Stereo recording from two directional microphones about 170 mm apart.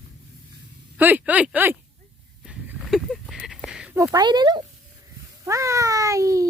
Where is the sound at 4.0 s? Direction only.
20° right (ahead or behind).